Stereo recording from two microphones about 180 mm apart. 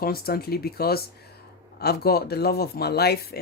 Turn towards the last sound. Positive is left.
turn(degrees=60)  # may be behind; listen again after turning